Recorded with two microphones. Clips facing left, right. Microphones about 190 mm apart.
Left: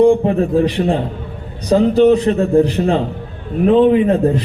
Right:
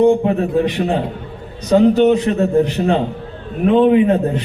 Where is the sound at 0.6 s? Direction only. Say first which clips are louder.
Left 2 dB; 35° left (ahead or behind).